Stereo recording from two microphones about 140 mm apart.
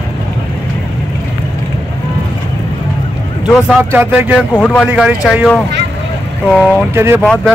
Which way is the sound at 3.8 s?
15° right (ahead or behind).